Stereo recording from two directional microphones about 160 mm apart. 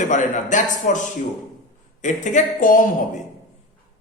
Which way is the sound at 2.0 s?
50° left (ahead or behind).